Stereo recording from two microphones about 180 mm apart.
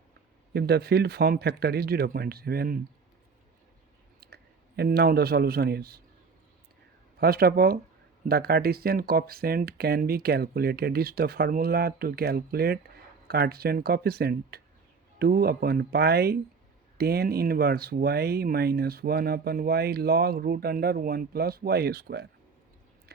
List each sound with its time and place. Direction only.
0.5 s speech: 65° right (ahead or behind)
4.8 s speech: 60° right (ahead or behind)
7.2 s speech: 60° right (ahead or behind)